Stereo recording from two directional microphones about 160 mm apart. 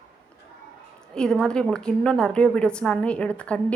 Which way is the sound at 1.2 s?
5° left (ahead or behind).